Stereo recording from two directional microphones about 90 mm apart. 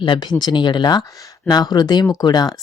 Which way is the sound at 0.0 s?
60° left (ahead or behind).